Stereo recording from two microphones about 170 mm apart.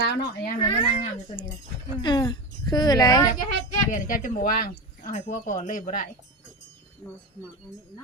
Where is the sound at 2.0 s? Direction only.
25° left (ahead or behind).